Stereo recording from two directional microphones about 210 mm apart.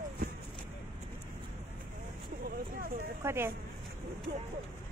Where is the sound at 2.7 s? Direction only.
45° right (ahead or behind).